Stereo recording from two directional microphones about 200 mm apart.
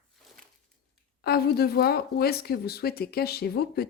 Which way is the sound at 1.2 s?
50° left (ahead or behind).